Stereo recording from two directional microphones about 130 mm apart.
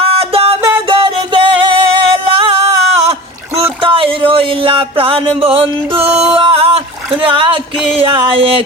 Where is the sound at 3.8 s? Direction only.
45° right (ahead or behind).